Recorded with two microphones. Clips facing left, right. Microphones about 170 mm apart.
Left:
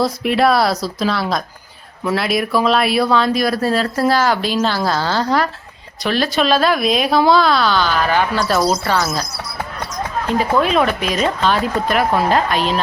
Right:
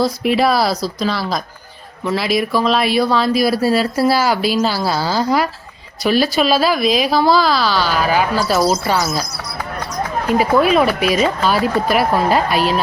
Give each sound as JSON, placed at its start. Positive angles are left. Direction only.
{"t": 0.0, "sound": "speech", "side_deg": 0}
{"t": 10.2, "sound": "speech", "side_deg": -10}